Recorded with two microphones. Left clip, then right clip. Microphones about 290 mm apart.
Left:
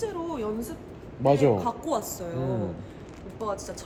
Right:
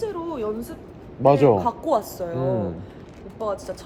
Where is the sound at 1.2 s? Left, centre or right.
Right.